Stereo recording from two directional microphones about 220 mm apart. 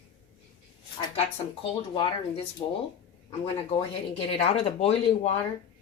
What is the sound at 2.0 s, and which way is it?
Speech, 25° left (ahead or behind).